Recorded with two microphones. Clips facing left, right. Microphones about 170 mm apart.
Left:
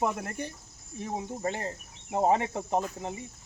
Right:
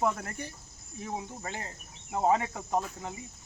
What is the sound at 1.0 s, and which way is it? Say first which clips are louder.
Speech: left 4 dB; 30° left (ahead or behind).